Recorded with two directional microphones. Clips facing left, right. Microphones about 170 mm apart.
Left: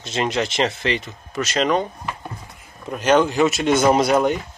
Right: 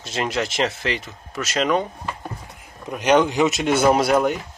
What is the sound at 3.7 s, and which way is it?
Speech, 5° right (ahead or behind).